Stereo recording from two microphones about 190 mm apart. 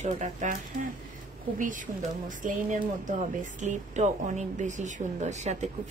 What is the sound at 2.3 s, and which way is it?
Speech, 40° right (ahead or behind).